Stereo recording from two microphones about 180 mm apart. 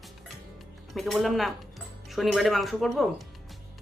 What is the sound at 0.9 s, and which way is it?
Speech, centre (ahead or behind).